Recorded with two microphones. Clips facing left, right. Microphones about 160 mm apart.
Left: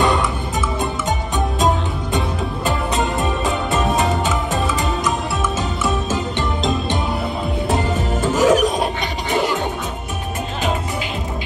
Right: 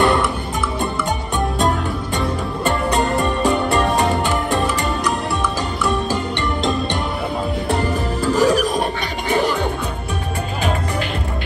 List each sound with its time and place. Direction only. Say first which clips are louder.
0.0 s music: right 1 dB; centre (ahead or behind)
2.1 s music: left 1 dB; centre (ahead or behind)
7.7 s music: left 1 dB; 20° left (ahead or behind)
8.4 s music: left 2 dB; 40° right (ahead or behind)